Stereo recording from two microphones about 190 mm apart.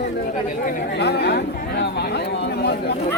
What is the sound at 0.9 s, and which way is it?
Speech, 60° left (ahead or behind).